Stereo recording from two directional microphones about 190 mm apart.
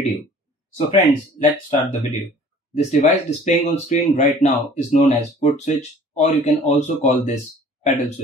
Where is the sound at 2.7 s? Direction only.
35° left (ahead or behind).